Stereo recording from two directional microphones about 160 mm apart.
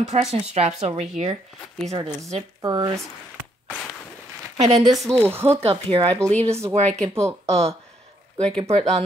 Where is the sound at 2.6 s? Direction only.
25° right (ahead or behind).